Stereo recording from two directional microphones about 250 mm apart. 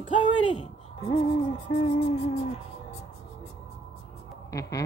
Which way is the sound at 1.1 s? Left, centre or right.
Left.